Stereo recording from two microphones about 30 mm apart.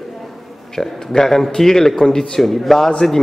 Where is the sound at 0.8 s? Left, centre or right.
Centre.